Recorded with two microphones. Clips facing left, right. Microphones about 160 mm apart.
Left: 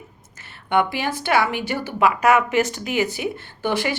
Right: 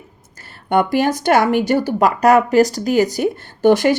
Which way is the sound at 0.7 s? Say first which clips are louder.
Right 5 dB; 40° right (ahead or behind).